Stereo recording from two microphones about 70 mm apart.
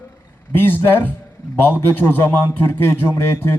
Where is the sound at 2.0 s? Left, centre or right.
Left.